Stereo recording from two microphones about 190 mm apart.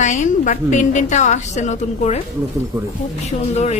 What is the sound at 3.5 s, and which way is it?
Speech, 35° left (ahead or behind).